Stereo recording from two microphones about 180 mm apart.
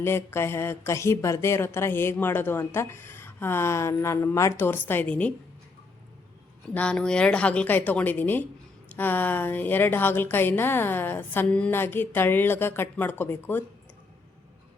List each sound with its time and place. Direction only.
0.0 s speech: 15° left (ahead or behind)
6.7 s speech: 5° left (ahead or behind)